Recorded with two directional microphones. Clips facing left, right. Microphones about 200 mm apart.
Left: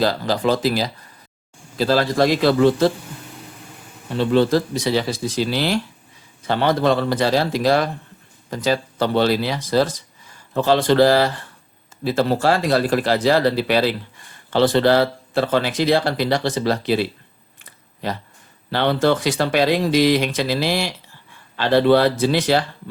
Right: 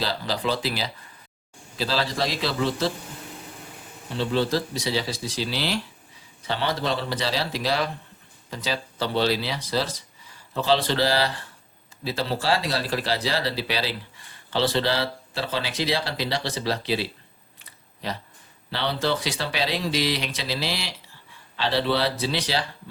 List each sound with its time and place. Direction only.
0.0 s speech: 45° left (ahead or behind)
4.2 s speech: 55° left (ahead or behind)
18.7 s speech: 55° left (ahead or behind)